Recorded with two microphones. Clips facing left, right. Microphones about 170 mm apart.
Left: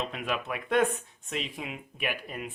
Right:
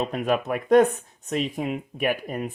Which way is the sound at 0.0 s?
45° right (ahead or behind).